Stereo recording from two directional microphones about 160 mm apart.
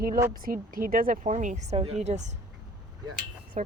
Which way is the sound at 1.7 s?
40° right (ahead or behind).